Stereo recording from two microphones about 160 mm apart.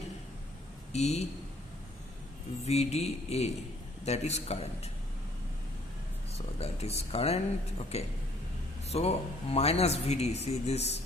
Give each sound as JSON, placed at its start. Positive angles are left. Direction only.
{"t": 0.9, "sound": "a man's voice", "side_deg": 45}
{"t": 2.6, "sound": "a man's voice", "side_deg": 40}
{"t": 6.3, "sound": "speech", "side_deg": 40}